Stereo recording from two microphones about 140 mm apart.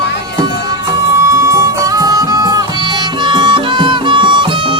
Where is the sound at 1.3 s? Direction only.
20° right (ahead or behind).